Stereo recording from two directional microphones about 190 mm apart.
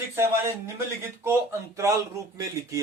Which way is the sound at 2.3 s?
15° right (ahead or behind).